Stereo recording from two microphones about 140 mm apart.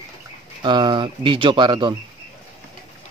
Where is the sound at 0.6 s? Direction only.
35° right (ahead or behind).